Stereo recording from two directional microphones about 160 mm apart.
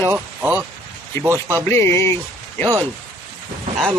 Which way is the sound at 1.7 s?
15° left (ahead or behind).